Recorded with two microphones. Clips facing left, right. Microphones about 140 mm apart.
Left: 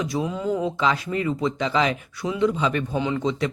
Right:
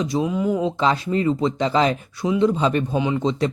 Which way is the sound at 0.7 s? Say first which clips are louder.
Right 3 dB; 30° right (ahead or behind).